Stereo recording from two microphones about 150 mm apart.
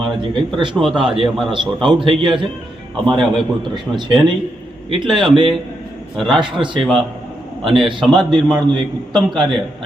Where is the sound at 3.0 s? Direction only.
Centre (ahead or behind).